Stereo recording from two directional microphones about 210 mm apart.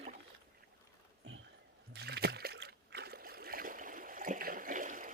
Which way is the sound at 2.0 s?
50° right (ahead or behind).